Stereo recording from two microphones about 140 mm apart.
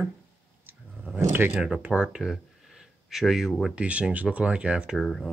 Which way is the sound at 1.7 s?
5° right (ahead or behind).